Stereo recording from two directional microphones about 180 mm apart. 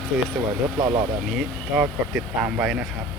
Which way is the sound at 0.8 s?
20° right (ahead or behind).